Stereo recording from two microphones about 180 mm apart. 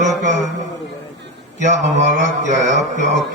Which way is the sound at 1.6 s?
40° right (ahead or behind).